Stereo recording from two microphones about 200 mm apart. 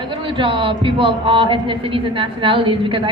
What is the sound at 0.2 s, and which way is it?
A man's voice, 25° right (ahead or behind).